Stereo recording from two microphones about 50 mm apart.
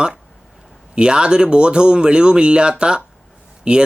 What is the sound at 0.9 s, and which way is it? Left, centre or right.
Speech, centre.